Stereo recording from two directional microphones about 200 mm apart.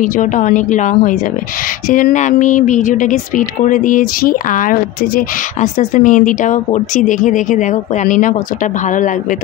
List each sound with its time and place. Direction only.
0.0 s speech: 40° left (ahead or behind)